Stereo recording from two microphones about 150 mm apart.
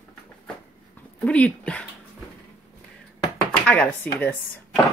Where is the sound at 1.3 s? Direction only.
10° left (ahead or behind).